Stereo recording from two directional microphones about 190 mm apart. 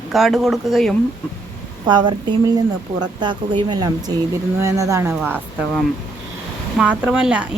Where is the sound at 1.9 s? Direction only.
25° right (ahead or behind).